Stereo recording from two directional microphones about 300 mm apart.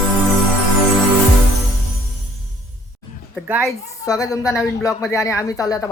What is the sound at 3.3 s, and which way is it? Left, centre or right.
Speech, centre.